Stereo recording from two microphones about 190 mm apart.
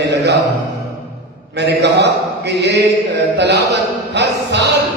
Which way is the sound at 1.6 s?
65° right (ahead or behind).